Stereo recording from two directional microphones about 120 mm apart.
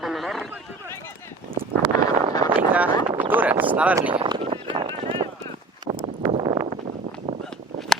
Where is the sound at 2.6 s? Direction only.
15° right (ahead or behind).